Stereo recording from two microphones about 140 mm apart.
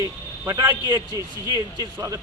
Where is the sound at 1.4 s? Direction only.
30° left (ahead or behind).